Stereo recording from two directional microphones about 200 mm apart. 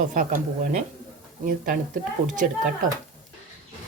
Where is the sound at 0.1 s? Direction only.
40° right (ahead or behind).